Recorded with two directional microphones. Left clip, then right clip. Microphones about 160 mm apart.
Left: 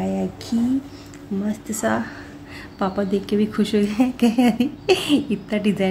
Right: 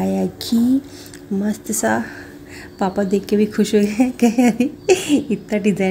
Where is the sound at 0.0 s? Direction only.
25° right (ahead or behind).